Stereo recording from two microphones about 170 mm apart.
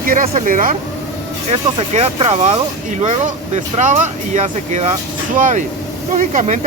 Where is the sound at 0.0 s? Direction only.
55° right (ahead or behind).